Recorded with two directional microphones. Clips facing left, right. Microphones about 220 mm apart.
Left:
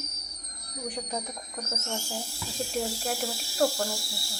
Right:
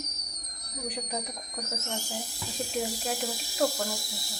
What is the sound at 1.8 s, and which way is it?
Speech, 15° right (ahead or behind).